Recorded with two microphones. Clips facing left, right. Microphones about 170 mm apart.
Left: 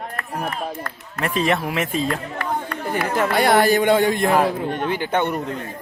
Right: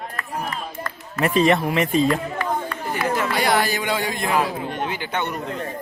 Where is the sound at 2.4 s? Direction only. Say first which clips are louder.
Even; 55° left (ahead or behind).